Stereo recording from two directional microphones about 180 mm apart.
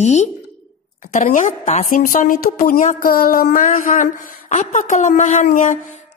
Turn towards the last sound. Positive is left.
turn(degrees=45)  # may be behind; listen again after turning